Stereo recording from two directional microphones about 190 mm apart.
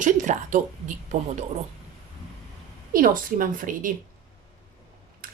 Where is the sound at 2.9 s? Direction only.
45° right (ahead or behind).